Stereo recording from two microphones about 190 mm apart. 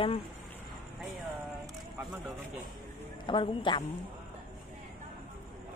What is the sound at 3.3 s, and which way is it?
Speech, 25° left (ahead or behind).